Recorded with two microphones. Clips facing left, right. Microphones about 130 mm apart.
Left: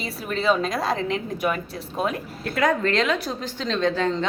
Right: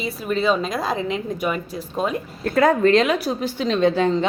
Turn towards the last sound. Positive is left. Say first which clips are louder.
# right 5 dB
turn(degrees=-15)  # may be behind; listen again after turning